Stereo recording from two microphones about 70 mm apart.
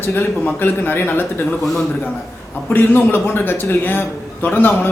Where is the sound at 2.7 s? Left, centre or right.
Left.